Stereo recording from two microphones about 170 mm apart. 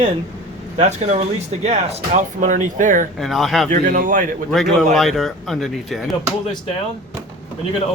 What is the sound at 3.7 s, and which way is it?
Speech, 50° right (ahead or behind).